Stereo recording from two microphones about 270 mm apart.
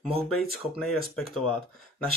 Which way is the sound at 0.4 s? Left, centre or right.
Centre.